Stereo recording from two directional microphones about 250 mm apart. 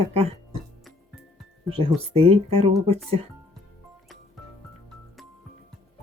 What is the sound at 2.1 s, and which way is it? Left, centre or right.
Speech, right.